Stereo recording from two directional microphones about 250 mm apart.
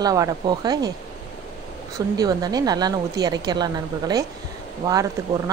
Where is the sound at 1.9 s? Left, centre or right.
Centre.